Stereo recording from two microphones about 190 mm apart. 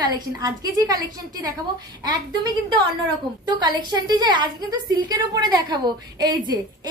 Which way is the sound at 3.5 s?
20° right (ahead or behind).